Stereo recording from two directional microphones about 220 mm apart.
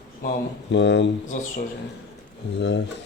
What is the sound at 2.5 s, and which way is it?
Speech, 55° left (ahead or behind).